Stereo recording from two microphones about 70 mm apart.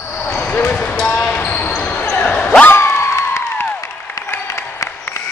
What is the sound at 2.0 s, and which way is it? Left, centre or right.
Basketball bounce, centre.